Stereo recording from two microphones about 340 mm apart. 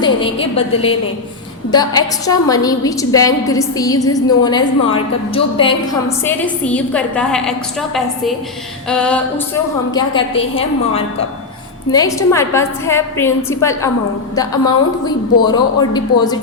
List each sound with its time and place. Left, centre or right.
0.0 s a woman's voice: centre
8.9 s music: centre
9.9 s a woman's voice: centre